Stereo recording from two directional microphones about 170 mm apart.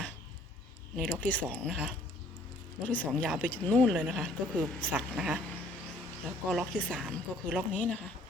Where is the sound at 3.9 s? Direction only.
5° right (ahead or behind).